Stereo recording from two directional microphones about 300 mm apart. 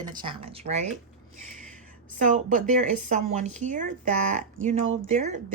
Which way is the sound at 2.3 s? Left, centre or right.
Right.